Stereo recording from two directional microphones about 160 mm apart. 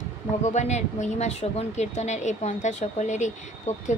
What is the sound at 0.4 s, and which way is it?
A woman's voice, 45° left (ahead or behind).